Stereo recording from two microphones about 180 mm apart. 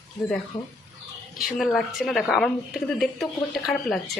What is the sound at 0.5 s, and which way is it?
Speech, 25° left (ahead or behind).